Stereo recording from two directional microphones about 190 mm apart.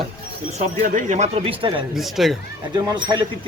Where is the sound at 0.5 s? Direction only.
40° right (ahead or behind).